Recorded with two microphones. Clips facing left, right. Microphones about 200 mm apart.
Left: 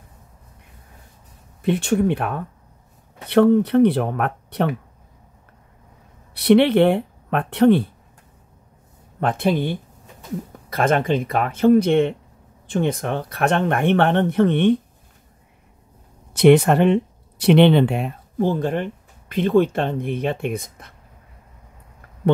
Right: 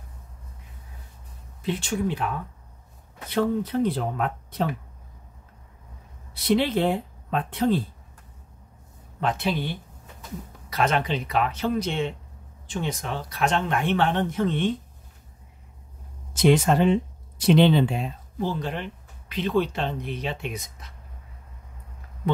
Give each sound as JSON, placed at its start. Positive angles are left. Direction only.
{"t": 1.6, "sound": "speech", "side_deg": 60}
{"t": 6.3, "sound": "speech", "side_deg": 70}
{"t": 9.2, "sound": "speech", "side_deg": 55}
{"t": 16.3, "sound": "speech", "side_deg": 60}